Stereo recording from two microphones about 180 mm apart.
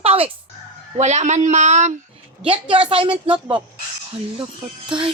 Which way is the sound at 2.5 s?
25° right (ahead or behind).